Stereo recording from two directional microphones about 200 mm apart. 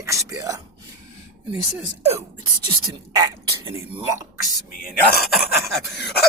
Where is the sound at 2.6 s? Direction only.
15° right (ahead or behind).